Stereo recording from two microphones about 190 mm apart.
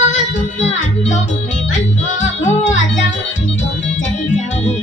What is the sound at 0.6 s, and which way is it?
Music, 35° left (ahead or behind).